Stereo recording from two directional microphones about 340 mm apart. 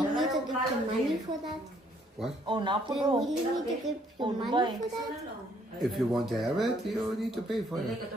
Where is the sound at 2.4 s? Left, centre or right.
Centre.